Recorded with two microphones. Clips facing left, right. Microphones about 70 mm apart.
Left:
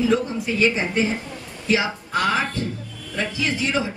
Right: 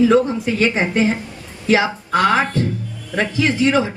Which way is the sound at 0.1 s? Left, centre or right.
Right.